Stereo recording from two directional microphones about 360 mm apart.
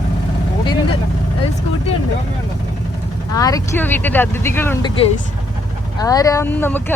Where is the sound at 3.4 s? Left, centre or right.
Centre.